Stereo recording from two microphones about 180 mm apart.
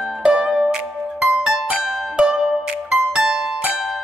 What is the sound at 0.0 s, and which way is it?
Music, 5° right (ahead or behind).